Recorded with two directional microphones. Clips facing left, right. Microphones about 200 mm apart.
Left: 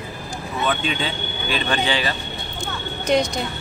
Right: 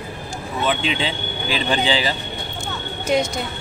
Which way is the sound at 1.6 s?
15° right (ahead or behind).